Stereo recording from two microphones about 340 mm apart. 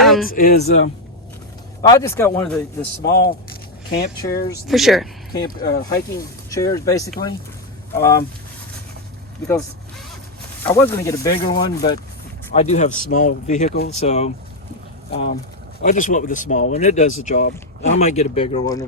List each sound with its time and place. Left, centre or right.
0.0 s a sound: centre
0.3 s speech: left
1.8 s speech: centre
3.0 s speech: left
4.7 s speech: centre
5.5 s speech: left
6.1 s speech: centre
10.7 s speech: centre